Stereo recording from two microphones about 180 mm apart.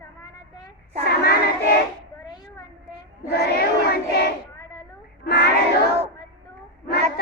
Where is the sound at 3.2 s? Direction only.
65° left (ahead or behind).